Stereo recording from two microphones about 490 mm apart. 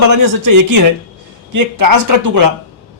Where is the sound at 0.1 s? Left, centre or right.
Right.